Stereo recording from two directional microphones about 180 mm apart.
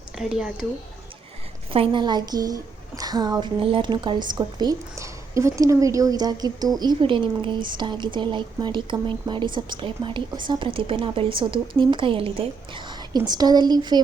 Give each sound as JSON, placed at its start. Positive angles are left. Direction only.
{"t": 0.2, "sound": "speech", "side_deg": -5}
{"t": 1.7, "sound": "speech", "side_deg": -30}